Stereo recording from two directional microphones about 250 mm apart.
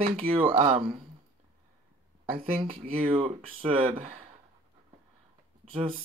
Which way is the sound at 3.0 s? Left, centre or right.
Right.